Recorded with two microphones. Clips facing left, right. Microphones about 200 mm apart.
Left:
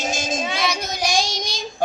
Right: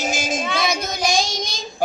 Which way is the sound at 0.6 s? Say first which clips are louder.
Right 2 dB; 50° right (ahead or behind).